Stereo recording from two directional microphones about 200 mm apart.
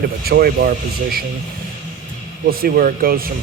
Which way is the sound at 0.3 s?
50° right (ahead or behind).